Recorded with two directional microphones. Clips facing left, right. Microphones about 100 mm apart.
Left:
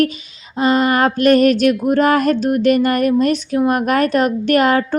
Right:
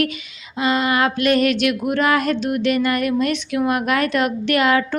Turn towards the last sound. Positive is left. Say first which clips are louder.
# left 3 dB
turn(degrees=40)  # may be behind; listen again after turning